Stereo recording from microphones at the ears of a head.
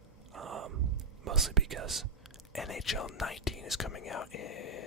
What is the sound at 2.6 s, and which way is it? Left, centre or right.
Speech, left.